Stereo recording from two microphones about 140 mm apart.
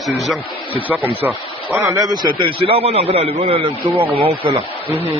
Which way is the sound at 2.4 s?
40° right (ahead or behind).